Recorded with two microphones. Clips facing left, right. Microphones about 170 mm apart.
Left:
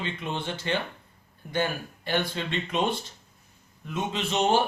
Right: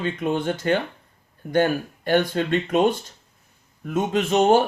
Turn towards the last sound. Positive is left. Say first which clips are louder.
# right 7 dB
turn(degrees=-45)  # may be behind; listen again after turning